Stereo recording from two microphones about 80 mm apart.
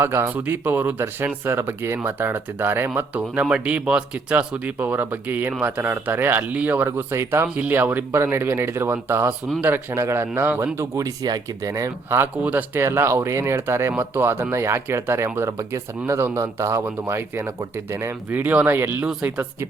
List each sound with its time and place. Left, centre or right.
0.0 s speech: right
7.5 s speech: right
12.0 s speech: right